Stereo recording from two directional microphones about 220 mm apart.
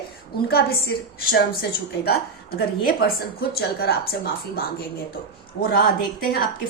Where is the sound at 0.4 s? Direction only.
45° left (ahead or behind).